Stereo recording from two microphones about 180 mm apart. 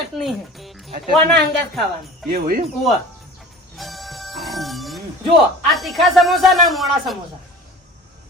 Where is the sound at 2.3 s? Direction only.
55° right (ahead or behind).